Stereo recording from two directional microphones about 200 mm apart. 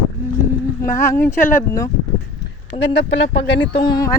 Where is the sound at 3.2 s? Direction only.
60° left (ahead or behind).